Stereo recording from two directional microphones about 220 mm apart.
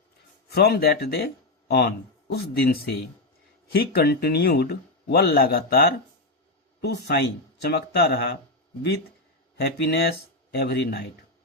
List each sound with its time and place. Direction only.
0.5 s a man's voice: 45° left (ahead or behind)
9.8 s a man's voice: 45° left (ahead or behind)